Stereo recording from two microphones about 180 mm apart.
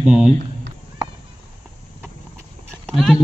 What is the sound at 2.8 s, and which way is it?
Speech, centre (ahead or behind).